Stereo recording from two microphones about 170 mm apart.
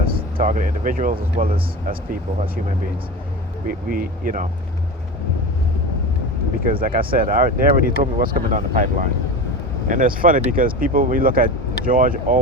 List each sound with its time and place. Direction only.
0.0 s speech: 60° right (ahead or behind)
3.7 s speech: 60° right (ahead or behind)
6.7 s speech: 55° right (ahead or behind)